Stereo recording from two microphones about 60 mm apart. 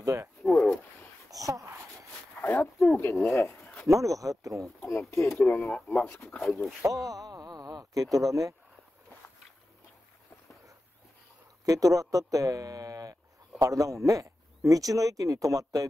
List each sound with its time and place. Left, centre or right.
0.0 s speech: right
0.4 s a sound: centre
1.3 s a sound: right
2.4 s a sound: left
3.3 s speech: left
3.9 s speech: right
4.8 s speech: left
5.2 s speech: centre
5.5 s speech: centre
6.4 s speech: centre
6.8 s speech: right
11.6 s speech: right
13.6 s speech: right